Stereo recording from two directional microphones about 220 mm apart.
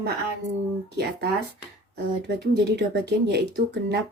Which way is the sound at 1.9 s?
50° right (ahead or behind).